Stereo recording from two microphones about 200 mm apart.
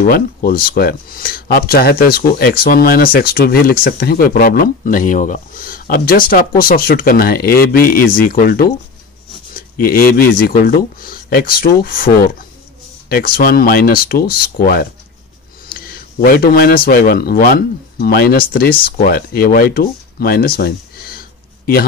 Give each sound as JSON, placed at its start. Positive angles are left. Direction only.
{"t": 0.0, "sound": "a man's voice", "side_deg": 45}